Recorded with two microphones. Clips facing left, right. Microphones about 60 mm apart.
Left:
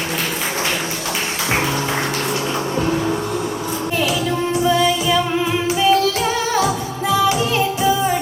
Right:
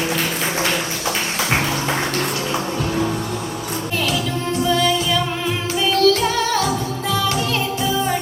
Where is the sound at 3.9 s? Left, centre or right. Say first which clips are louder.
Left 3 dB; centre.